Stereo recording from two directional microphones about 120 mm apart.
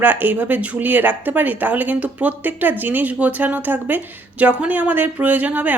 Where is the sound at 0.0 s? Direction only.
15° right (ahead or behind).